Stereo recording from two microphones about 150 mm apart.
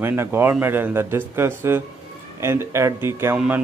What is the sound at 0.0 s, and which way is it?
Speech, 15° right (ahead or behind).